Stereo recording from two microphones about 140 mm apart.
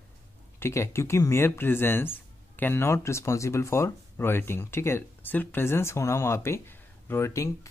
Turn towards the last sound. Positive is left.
turn(degrees=20)  # may be behind; listen again after turning